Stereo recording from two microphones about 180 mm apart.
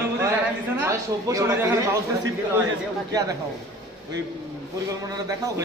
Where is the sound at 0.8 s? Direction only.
15° right (ahead or behind).